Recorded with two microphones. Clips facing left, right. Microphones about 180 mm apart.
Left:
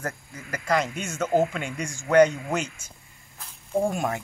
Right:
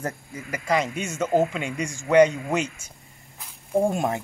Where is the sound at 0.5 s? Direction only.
5° right (ahead or behind).